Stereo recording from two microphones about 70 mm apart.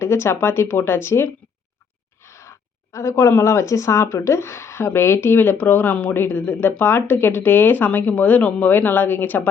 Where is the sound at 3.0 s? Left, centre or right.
Left.